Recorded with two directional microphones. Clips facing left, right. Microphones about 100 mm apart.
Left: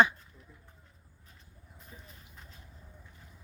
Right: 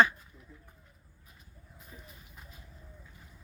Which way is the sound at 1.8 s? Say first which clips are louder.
Right 1 dB; 5° right (ahead or behind).